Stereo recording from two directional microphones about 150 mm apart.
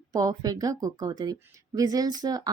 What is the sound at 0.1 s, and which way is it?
Speech, 25° right (ahead or behind).